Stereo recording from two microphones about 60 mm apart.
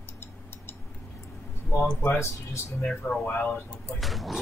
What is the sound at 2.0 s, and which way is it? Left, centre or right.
Speech, left.